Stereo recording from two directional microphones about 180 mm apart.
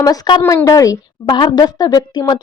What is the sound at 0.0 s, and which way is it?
A woman's voice, 20° left (ahead or behind).